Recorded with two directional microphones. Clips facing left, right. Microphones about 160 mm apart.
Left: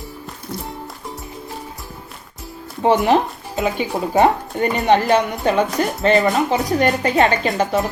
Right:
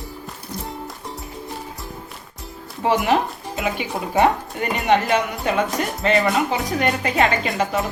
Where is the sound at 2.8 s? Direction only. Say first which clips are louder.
Left 4 dB; 25° left (ahead or behind).